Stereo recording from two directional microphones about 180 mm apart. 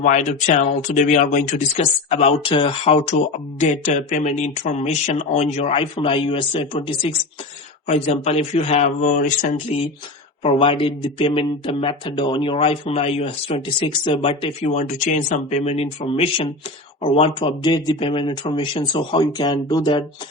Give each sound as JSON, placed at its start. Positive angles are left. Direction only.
{"t": 0.0, "sound": "speech", "side_deg": 40}
{"t": 14.6, "sound": "speech", "side_deg": 40}